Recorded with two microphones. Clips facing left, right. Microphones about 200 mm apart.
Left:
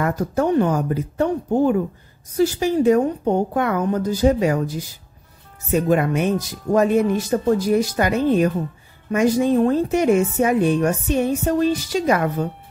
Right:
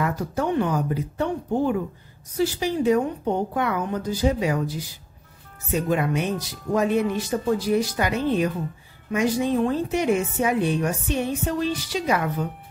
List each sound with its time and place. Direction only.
0.0 s a woman's voice: 45° left (ahead or behind)